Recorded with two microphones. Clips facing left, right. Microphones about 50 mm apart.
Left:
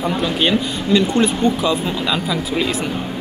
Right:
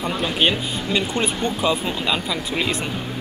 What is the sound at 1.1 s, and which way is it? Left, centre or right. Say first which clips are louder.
Speech: left 6 dB; centre.